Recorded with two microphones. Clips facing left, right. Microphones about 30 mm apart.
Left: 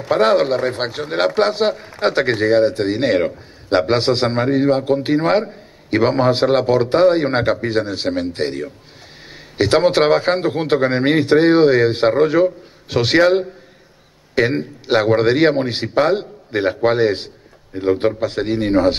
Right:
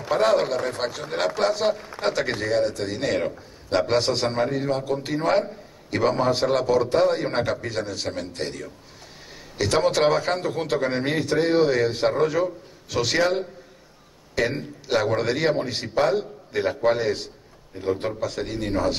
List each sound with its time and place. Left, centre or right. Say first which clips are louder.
0.1 s a man's voice: left 6 dB; left